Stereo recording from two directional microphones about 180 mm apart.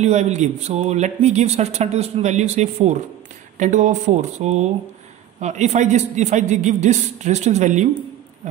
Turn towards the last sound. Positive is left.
turn(degrees=-40)  # may be behind; listen again after turning